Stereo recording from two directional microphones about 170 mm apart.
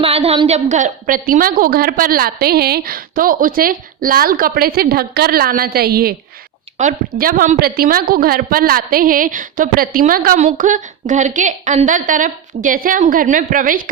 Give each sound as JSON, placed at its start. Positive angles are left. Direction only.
{"t": 0.0, "sound": "a woman's voice", "side_deg": -35}
{"t": 6.7, "sound": "a woman's voice", "side_deg": -50}